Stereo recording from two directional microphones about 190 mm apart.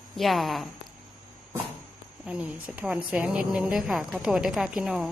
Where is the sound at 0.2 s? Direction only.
Centre (ahead or behind).